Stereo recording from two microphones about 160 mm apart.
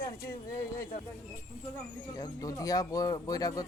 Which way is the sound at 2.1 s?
25° left (ahead or behind).